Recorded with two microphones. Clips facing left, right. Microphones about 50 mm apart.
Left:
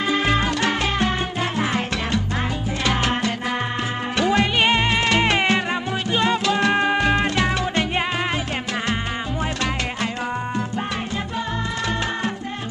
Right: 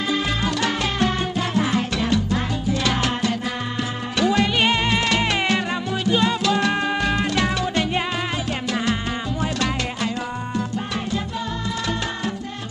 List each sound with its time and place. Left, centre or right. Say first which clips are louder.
0.3 s salsa music: left 2 dB; left
4.2 s music: even; left